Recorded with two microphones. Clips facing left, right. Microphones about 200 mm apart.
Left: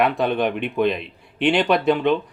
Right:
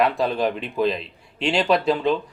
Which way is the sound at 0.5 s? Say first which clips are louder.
Left 2 dB; 60° left (ahead or behind).